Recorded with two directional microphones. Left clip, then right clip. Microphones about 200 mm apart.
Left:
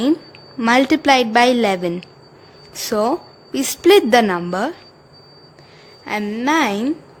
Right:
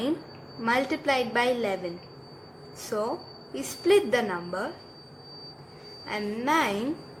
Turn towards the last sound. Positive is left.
turn(degrees=40)  # may be behind; listen again after turning